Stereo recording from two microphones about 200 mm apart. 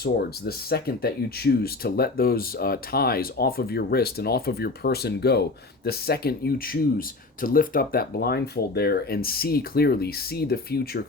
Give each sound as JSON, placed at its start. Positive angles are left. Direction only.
{"t": 0.0, "sound": "speech", "side_deg": 50}